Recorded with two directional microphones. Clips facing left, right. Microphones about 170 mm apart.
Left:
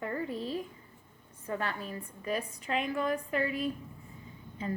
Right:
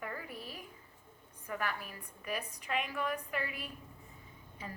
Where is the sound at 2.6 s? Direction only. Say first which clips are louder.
Left 5 dB; 35° left (ahead or behind).